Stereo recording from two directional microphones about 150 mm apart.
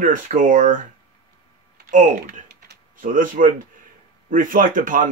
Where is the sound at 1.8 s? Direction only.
60° right (ahead or behind).